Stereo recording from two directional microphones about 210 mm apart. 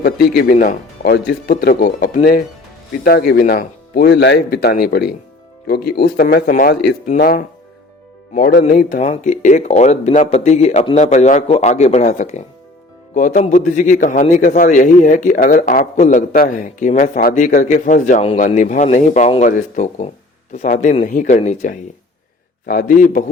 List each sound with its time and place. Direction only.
0.0 s speech: 50° left (ahead or behind)
0.5 s a man's voice: 35° left (ahead or behind)